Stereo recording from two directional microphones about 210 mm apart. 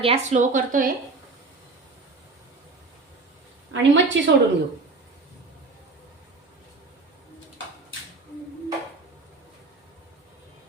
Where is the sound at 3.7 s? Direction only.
60° right (ahead or behind).